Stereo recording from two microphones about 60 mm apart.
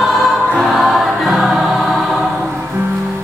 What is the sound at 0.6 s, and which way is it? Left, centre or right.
Choir, centre.